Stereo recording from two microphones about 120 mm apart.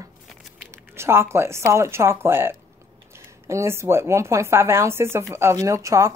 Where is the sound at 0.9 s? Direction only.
20° right (ahead or behind).